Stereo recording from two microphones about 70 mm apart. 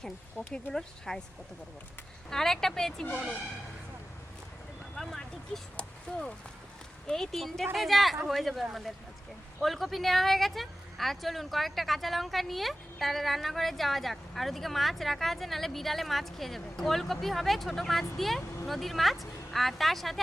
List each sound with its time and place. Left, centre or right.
0.5 s speech: centre
2.3 s speech: centre
5.0 s vehicle: centre
6.1 s speech: centre
7.1 s speech: centre